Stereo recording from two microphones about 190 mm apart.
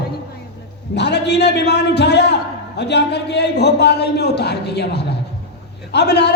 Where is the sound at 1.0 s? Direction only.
65° left (ahead or behind).